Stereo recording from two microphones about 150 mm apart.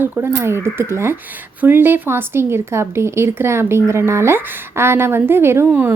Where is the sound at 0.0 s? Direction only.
15° right (ahead or behind).